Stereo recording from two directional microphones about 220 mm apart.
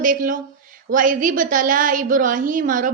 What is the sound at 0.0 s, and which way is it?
A woman's voice, 40° right (ahead or behind).